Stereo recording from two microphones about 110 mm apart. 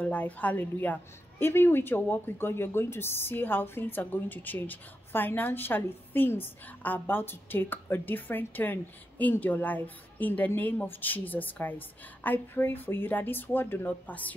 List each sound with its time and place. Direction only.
0.0 s a woman's voice: 15° left (ahead or behind)